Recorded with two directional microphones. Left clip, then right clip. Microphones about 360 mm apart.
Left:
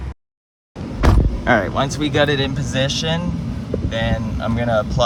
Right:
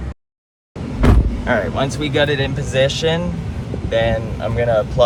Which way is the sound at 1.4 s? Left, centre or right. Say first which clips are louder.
Left 1 dB; left.